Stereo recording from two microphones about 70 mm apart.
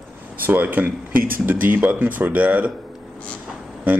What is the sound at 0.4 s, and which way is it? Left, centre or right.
Speech, right.